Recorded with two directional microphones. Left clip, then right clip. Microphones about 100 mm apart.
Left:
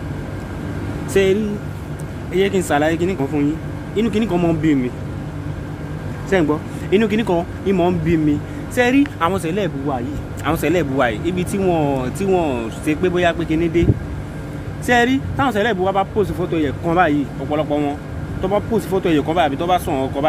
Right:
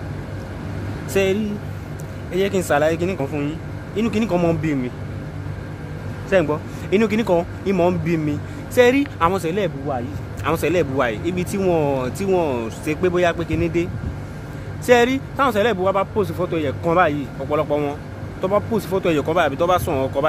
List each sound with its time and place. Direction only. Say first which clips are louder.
1.1 s speech: left 3 dB; 40° right (ahead or behind)
6.3 s speech: even; 20° right (ahead or behind)
6.9 s speech: left 1 dB; 40° right (ahead or behind)
8.7 s speech: right 1 dB; 50° right (ahead or behind)
9.2 s speech: even; 30° right (ahead or behind)
14.9 s speech: right 1 dB; 50° right (ahead or behind)